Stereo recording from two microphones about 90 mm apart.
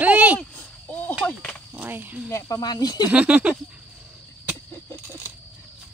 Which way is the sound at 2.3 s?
45° left (ahead or behind).